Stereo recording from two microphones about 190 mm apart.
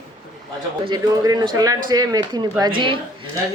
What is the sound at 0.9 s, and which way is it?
A woman's voice, 20° right (ahead or behind).